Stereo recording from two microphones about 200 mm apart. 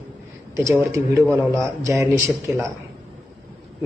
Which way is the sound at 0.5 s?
15° right (ahead or behind).